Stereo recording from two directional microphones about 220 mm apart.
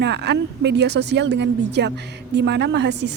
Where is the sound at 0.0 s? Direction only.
50° right (ahead or behind).